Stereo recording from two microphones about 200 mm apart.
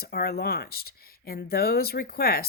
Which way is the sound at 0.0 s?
50° left (ahead or behind).